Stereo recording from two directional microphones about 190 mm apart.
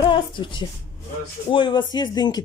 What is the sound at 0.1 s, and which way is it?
A woman's voice, 25° left (ahead or behind).